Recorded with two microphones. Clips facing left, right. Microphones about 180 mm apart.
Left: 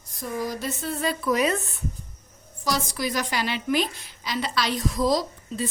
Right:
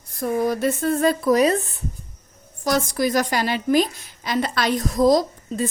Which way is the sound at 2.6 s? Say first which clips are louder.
Right 6 dB; 50° right (ahead or behind).